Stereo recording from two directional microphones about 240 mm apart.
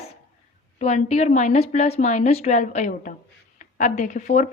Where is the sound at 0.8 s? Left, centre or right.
Left.